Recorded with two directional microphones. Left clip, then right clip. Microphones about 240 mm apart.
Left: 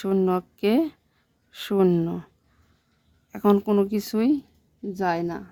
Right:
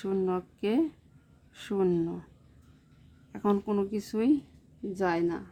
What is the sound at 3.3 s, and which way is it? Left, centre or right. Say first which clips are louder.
A woman's voice: left 8 dB; left.